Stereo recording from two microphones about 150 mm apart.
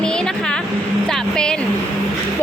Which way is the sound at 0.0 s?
5° left (ahead or behind).